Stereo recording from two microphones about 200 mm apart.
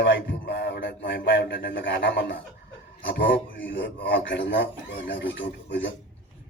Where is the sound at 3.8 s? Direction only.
60° left (ahead or behind).